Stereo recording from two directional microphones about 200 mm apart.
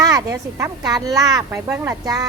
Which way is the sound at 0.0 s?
15° right (ahead or behind).